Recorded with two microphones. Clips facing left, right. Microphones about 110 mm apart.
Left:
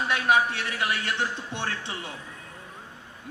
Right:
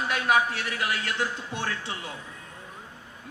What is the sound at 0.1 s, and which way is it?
A man's voice, 25° left (ahead or behind).